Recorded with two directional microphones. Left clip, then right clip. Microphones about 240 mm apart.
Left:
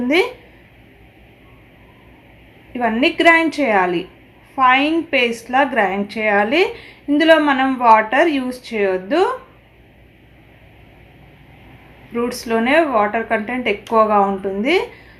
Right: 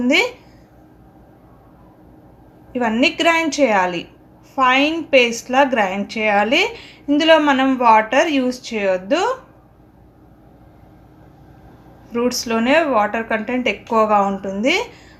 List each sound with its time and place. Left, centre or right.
2.7 s a woman's voice: right
12.1 s a woman's voice: right